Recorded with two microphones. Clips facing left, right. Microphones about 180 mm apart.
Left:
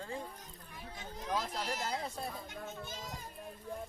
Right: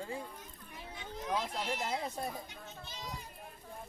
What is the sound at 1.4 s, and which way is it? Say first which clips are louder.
Speech: right 1 dB; 40° left (ahead or behind).